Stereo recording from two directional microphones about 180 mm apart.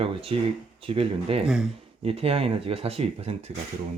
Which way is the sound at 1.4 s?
5° right (ahead or behind).